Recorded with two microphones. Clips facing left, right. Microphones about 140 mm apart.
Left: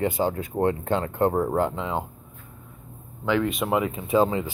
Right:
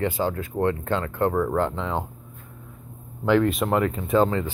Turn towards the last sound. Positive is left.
turn(degrees=10)  # may be behind; listen again after turning